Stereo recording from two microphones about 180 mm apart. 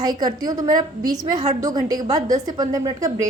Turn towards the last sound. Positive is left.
turn(degrees=-20)  # may be behind; listen again after turning